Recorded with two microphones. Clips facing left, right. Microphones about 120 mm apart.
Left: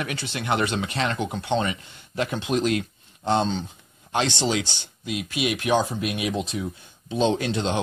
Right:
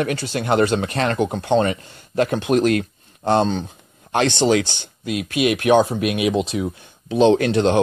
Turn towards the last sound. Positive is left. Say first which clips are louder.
# right 9 dB
turn(degrees=-60)  # may be behind; listen again after turning